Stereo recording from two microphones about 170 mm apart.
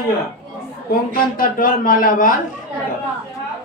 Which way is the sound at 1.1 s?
55° left (ahead or behind).